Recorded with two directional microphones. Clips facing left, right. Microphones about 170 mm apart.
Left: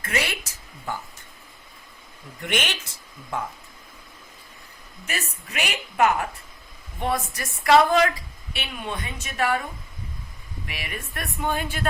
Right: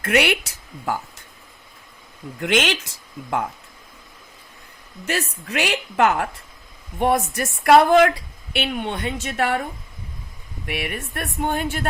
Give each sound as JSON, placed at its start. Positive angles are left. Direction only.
{"t": 0.0, "sound": "a woman's voice", "side_deg": -70}
{"t": 2.4, "sound": "speech", "side_deg": -90}
{"t": 5.0, "sound": "a woman's voice", "side_deg": -85}
{"t": 7.0, "sound": "a woman's voice", "side_deg": -60}
{"t": 10.7, "sound": "speech", "side_deg": -60}